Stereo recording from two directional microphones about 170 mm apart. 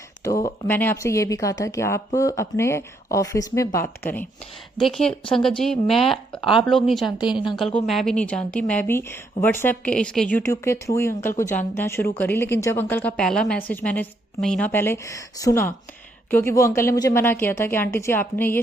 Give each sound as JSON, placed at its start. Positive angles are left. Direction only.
{"t": 0.3, "sound": "a woman's voice", "side_deg": 20}